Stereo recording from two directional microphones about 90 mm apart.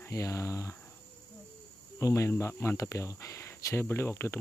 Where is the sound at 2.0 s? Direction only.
35° left (ahead or behind).